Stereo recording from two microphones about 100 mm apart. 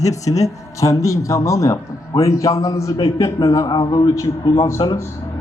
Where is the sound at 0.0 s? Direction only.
35° left (ahead or behind).